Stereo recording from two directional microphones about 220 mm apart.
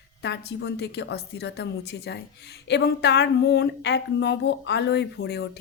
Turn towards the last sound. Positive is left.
turn(degrees=50)  # may be behind; listen again after turning